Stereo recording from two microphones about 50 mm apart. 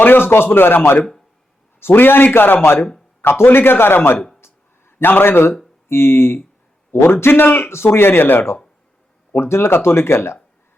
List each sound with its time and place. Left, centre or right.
0.0 s a man's voice: left
1.8 s a man's voice: left
4.4 s a sound: left
5.9 s a man's voice: left
7.7 s a man's voice: left
9.3 s speech: left